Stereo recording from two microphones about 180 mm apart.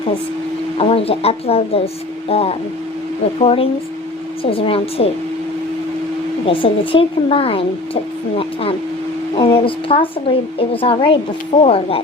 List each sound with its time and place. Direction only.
0.8 s speech: 35° left (ahead or behind)
6.4 s speech: 30° left (ahead or behind)
9.3 s a woman's voice: 30° left (ahead or behind)